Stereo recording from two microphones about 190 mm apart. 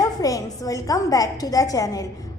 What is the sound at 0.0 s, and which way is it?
A woman's voice, 20° left (ahead or behind).